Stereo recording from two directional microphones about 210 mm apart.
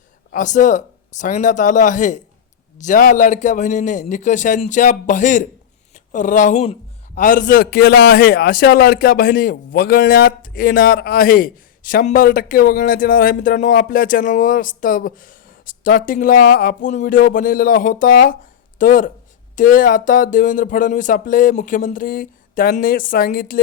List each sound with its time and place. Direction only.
0.3 s a man's voice: 35° left (ahead or behind)